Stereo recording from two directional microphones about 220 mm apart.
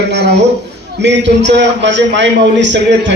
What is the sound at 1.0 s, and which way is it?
A man's voice, 50° right (ahead or behind).